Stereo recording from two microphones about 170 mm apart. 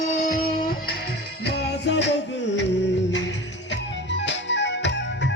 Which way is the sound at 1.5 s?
80° left.